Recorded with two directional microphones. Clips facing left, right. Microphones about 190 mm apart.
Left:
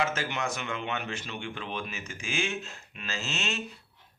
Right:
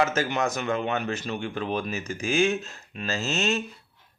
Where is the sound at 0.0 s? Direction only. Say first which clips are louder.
Right 6 dB; 40° right (ahead or behind).